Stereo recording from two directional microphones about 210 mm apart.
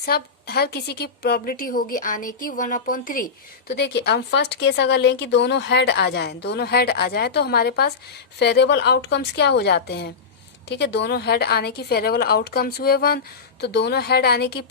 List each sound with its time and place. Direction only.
0.0 s speech: 50° left (ahead or behind)
3.7 s speech: 50° left (ahead or behind)